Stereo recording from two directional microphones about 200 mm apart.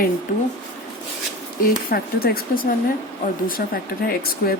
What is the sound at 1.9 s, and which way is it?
Speech, 50° left (ahead or behind).